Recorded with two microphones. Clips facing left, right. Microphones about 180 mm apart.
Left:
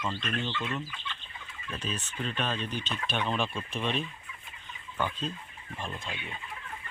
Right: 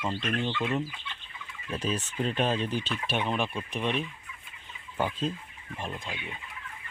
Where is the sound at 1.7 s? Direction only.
10° right (ahead or behind).